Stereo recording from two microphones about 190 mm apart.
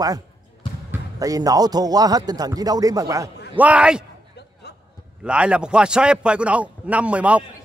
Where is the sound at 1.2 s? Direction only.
20° right (ahead or behind).